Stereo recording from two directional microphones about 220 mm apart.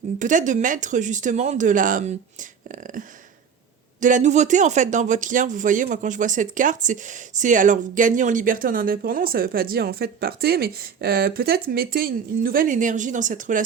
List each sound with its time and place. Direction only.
0.2 s speech: 35° right (ahead or behind)